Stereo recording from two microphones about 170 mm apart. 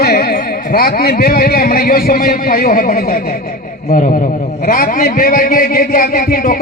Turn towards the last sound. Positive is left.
turn(degrees=55)  # may be behind; listen again after turning